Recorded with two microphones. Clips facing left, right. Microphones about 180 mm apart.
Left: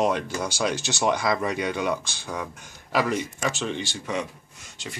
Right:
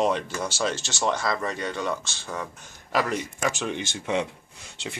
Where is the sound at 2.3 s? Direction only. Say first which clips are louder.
Left 1 dB; 5° left (ahead or behind).